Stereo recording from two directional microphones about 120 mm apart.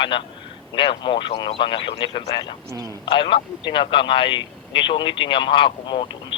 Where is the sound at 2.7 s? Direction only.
30° right (ahead or behind).